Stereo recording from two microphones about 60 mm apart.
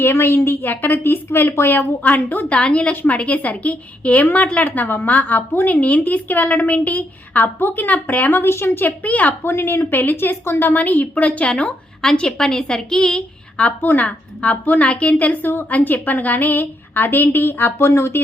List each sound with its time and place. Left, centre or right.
0.0 s a woman's voice: left; by 2.9 s centre
2.9 s a woman's voice: left
9.0 s a woman's voice: left
9.4 s a woman's voice: left; by 13.2 s centre
13.6 s a woman's voice: left